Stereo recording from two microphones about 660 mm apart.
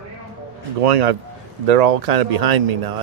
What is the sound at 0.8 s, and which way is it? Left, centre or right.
A man's voice, right.